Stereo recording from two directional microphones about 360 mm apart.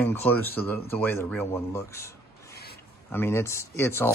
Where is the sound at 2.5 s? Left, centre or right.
Left.